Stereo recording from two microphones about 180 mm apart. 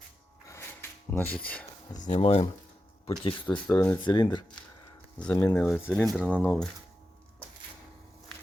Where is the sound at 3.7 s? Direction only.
20° left (ahead or behind).